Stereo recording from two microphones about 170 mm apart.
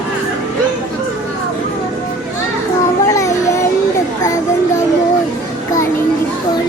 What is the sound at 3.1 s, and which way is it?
Music, 20° left (ahead or behind).